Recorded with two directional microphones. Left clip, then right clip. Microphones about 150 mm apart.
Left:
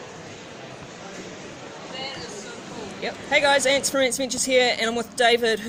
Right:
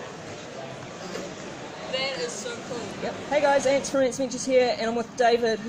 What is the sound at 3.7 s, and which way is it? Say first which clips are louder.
Speech: left 2 dB; 25° left (ahead or behind).